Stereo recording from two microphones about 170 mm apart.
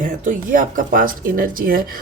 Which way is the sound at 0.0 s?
50° right (ahead or behind).